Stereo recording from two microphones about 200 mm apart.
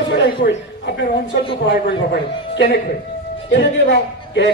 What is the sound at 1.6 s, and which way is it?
A man's voice, 60° left (ahead or behind).